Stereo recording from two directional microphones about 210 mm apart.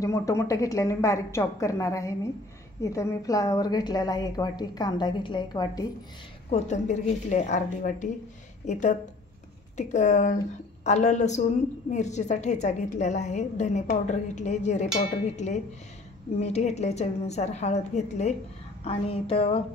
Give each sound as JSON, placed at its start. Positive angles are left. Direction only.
{"t": 0.0, "sound": "a woman's voice", "side_deg": 15}
{"t": 6.5, "sound": "a woman's voice", "side_deg": 35}